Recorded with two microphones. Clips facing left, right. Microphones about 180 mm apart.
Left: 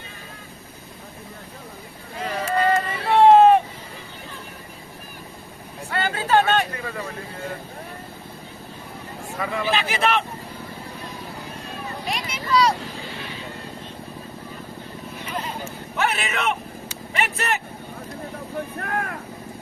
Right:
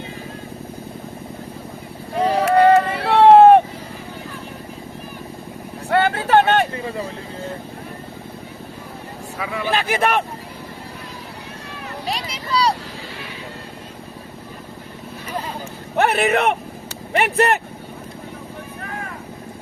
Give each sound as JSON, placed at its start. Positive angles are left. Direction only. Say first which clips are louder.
{"t": 2.4, "sound": "a sound", "louder": "right 7 dB", "side_deg": -70}
{"t": 5.9, "sound": "a sound", "louder": "right 5 dB", "side_deg": -65}
{"t": 6.7, "sound": "vehicle", "louder": "right 5 dB", "side_deg": -20}
{"t": 9.4, "sound": "speech", "louder": "even", "side_deg": -5}
{"t": 9.7, "sound": "speech", "louder": "right 5 dB", "side_deg": -55}
{"t": 12.0, "sound": "a sound", "louder": "right 2 dB", "side_deg": -35}
{"t": 16.0, "sound": "speech", "louder": "right 8 dB", "side_deg": -60}
{"t": 17.1, "sound": "vehicle", "louder": "right 8 dB", "side_deg": -55}
{"t": 18.8, "sound": "vehicle", "louder": "left 3 dB", "side_deg": 60}